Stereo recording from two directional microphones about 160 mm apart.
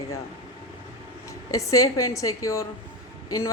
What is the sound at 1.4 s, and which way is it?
A woman's voice, 20° left (ahead or behind).